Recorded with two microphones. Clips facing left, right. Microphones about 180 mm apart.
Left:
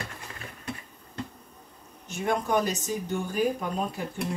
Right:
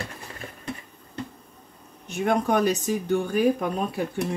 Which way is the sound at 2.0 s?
60° right (ahead or behind).